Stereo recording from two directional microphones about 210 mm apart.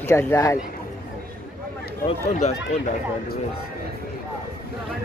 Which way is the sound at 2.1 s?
30° left (ahead or behind).